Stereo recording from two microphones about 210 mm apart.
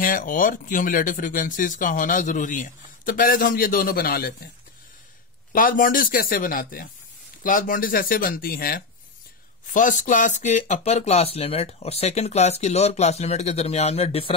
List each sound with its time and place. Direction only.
0.0 s speech: 40° left (ahead or behind)
5.5 s speech: 40° left (ahead or behind)